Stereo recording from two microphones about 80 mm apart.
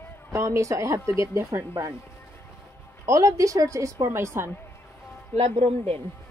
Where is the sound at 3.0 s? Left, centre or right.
Right.